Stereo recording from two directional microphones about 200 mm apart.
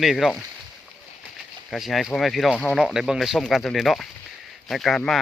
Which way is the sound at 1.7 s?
Centre (ahead or behind).